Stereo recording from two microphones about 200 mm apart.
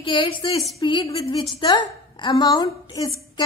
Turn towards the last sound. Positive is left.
turn(degrees=20)  # may be behind; listen again after turning